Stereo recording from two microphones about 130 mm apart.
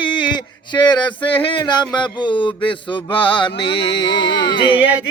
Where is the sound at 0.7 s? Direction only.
35° left (ahead or behind).